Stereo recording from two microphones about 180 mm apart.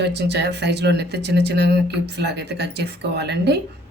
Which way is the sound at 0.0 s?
70° right (ahead or behind).